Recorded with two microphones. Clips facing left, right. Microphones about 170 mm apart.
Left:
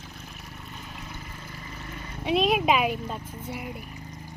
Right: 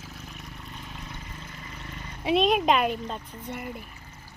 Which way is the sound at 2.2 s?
Centre (ahead or behind).